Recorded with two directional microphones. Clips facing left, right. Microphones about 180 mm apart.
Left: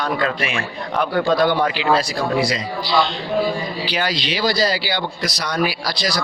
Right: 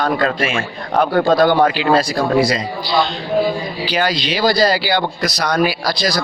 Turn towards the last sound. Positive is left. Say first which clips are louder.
# right 5 dB
turn(degrees=-45)  # may be behind; listen again after turning